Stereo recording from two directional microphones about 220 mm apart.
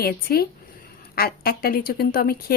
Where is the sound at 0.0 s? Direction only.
45° left (ahead or behind).